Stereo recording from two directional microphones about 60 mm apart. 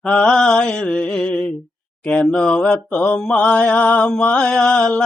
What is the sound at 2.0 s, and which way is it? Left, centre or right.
Speech, centre.